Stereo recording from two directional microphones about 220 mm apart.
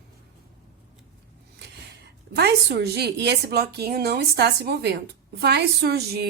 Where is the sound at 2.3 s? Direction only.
50° right (ahead or behind).